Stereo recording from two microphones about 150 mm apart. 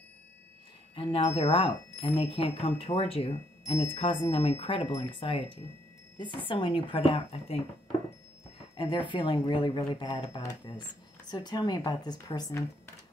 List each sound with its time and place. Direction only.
0.9 s speech: 40° left (ahead or behind)
8.7 s speech: 35° left (ahead or behind)